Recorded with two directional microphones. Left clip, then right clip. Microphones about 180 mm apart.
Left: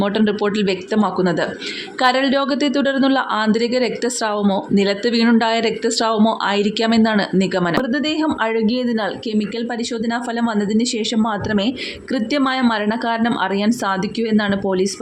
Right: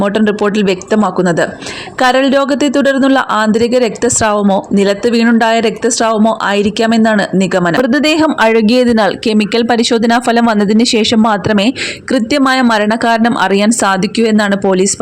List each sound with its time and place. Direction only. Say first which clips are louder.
0.0 s speech: right 6 dB; 30° right (ahead or behind)